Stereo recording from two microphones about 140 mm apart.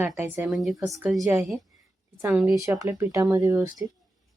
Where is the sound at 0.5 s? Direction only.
Centre (ahead or behind).